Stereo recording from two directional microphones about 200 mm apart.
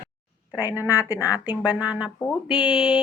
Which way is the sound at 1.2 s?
15° left (ahead or behind).